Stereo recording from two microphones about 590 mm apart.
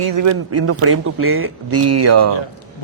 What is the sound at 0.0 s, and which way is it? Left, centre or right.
A man's voice, right.